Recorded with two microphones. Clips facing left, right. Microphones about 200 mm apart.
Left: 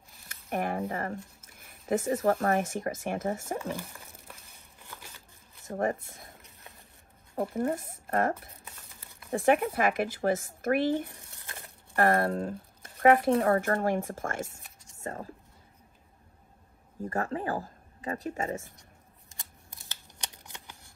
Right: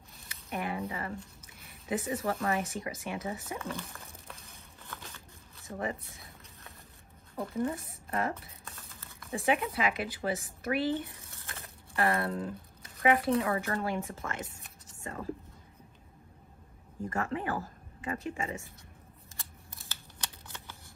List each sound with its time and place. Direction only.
0.3 s speech: 50° left (ahead or behind)
3.5 s speech: 15° left (ahead or behind)
4.8 s a sound: 15° left (ahead or behind)
5.7 s speech: 50° left (ahead or behind)
7.5 s speech: 50° left (ahead or behind)
8.6 s a sound: 15° left (ahead or behind)
9.3 s speech: 50° left (ahead or behind)
11.1 s crumpling: 15° left (ahead or behind)
11.9 s speech: 50° left (ahead or behind)
17.1 s speech: 35° left (ahead or behind)
19.9 s shuffling cards: 15° left (ahead or behind)